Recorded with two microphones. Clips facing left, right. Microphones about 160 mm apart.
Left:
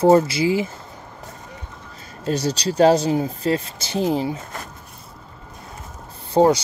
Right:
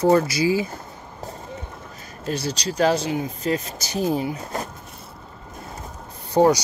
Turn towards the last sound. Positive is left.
turn(degrees=25)  # may be behind; listen again after turning